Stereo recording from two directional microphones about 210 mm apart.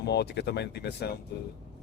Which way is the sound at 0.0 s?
50° left (ahead or behind).